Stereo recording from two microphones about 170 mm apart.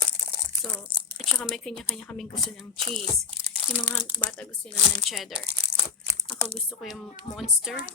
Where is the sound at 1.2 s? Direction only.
Centre (ahead or behind).